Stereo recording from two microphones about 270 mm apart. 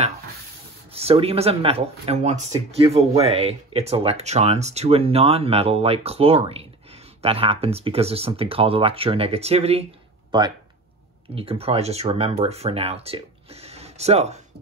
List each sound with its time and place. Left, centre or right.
0.9 s speech: right